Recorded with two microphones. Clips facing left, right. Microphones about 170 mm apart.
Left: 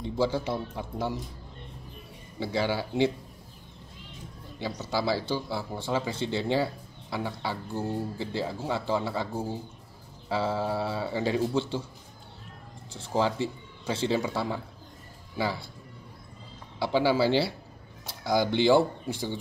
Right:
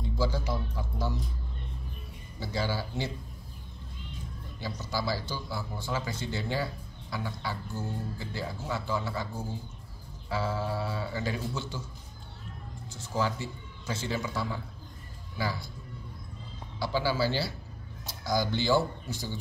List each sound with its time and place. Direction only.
0.0 s speech: 25° left (ahead or behind)
2.5 s speech: 65° left (ahead or behind)
4.6 s speech: 70° left (ahead or behind)
5.2 s a man's voice: 30° left (ahead or behind)
12.9 s a man's voice: 30° left (ahead or behind)
16.9 s a man's voice: 25° left (ahead or behind)
18.2 s speech: 65° left (ahead or behind)
18.8 s a man's voice: 30° left (ahead or behind)